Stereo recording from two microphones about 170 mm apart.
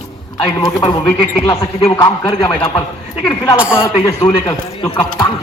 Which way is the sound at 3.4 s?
5° right (ahead or behind).